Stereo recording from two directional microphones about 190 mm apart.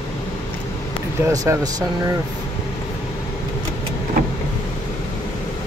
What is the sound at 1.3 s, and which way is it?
Speech, 20° right (ahead or behind).